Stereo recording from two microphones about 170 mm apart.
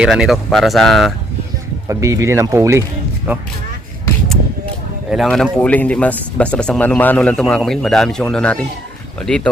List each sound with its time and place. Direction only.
0.0 s speech: 5° right (ahead or behind)
1.9 s speech: 20° right (ahead or behind)
5.1 s speech: centre (ahead or behind)